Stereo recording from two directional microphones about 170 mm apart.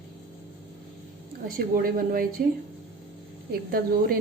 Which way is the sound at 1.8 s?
60° right (ahead or behind).